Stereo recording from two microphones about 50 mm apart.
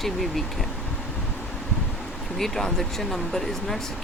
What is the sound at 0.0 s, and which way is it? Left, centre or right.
Speech, centre.